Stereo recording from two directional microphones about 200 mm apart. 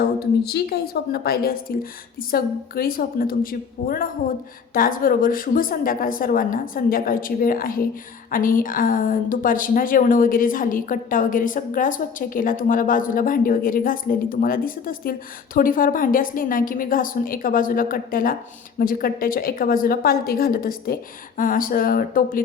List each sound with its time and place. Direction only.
0.2 s a woman's voice: 50° left (ahead or behind)